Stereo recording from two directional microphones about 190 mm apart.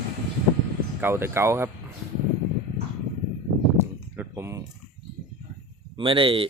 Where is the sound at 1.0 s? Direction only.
10° right (ahead or behind).